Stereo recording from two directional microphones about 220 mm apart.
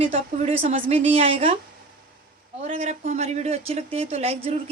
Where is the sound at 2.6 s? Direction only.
30° right (ahead or behind).